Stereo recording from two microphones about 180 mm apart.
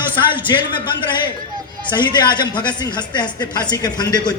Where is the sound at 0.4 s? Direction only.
25° left (ahead or behind).